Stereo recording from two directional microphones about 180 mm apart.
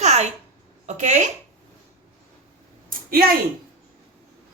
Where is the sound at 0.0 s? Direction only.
40° right (ahead or behind).